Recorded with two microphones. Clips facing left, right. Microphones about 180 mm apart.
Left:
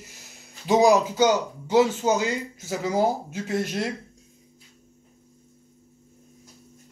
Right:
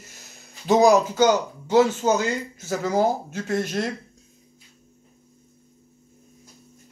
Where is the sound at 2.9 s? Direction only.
10° left (ahead or behind).